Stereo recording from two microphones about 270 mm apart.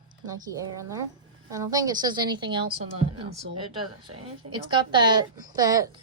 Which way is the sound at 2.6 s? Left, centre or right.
Right.